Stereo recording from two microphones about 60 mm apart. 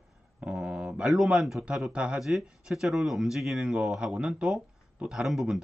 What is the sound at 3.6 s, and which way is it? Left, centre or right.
Speech, centre.